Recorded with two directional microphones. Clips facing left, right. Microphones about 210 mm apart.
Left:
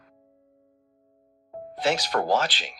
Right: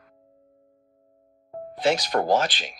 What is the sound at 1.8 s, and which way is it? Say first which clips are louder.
Speech: right 2 dB; 15° right (ahead or behind).